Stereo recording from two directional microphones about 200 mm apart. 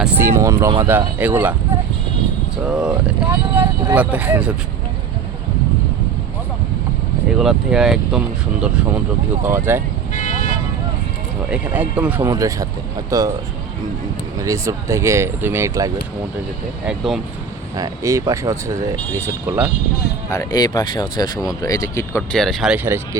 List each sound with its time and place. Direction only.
0.0 s speech: 10° right (ahead or behind)
2.6 s speech: 5° right (ahead or behind)
7.3 s speech: centre (ahead or behind)
9.4 s speech: 10° right (ahead or behind)
10.1 s vehicle: 40° left (ahead or behind)
11.5 s speech: 10° right (ahead or behind)
14.3 s speech: 15° right (ahead or behind)
16.8 s speech: centre (ahead or behind)
17.7 s speech: 15° right (ahead or behind)
20.3 s speech: 20° left (ahead or behind); by 23.0 s 5° right (ahead or behind)